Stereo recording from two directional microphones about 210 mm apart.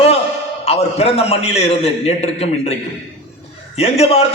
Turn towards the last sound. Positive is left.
turn(degrees=30)  # may be behind; listen again after turning